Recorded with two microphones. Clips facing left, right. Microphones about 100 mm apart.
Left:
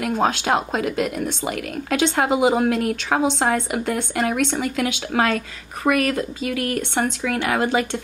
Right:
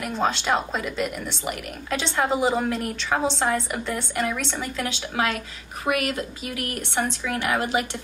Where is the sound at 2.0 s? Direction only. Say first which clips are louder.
Left 5 dB; 60° left (ahead or behind).